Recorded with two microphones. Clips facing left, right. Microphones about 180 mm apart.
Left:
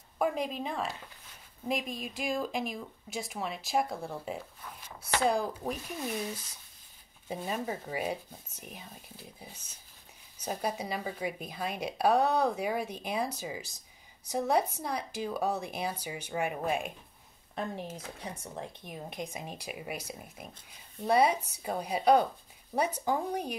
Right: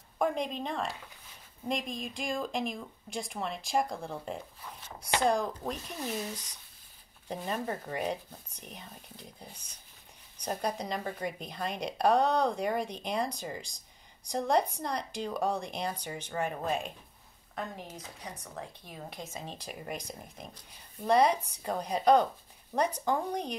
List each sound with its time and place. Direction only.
0.2 s speech: 5° left (ahead or behind)
17.6 s speech: 30° left (ahead or behind); by 23.5 s 5° left (ahead or behind)